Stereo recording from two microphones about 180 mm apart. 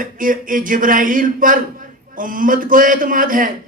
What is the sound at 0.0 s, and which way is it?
A man's voice, 50° right (ahead or behind).